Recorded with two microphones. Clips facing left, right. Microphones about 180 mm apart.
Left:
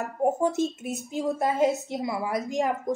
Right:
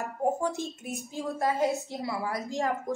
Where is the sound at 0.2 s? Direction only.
20° left (ahead or behind).